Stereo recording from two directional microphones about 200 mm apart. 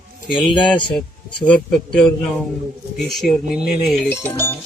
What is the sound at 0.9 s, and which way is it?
Speech, 5° left (ahead or behind).